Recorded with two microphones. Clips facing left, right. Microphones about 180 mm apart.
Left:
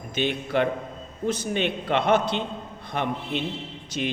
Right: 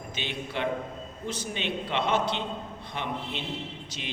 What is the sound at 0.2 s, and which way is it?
A man's voice, 50° left (ahead or behind).